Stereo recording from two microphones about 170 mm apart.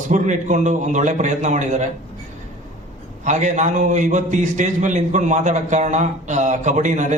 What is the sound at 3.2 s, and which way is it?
A man's voice, 45° right (ahead or behind).